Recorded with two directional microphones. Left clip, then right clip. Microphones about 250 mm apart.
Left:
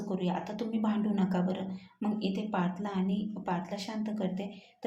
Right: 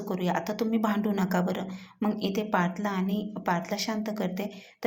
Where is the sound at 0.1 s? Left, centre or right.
Centre.